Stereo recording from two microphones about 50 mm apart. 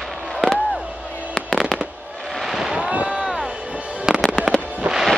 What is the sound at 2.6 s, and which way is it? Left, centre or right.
Boat, centre.